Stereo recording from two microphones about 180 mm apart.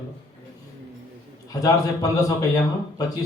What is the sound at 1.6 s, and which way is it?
Speech, 20° left (ahead or behind).